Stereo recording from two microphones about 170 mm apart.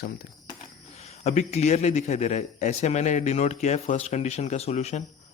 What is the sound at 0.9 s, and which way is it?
A man's voice, 40° left (ahead or behind).